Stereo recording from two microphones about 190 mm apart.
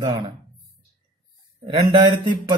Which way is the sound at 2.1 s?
25° right (ahead or behind).